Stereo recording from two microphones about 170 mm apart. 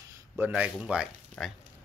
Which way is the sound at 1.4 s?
5° left (ahead or behind).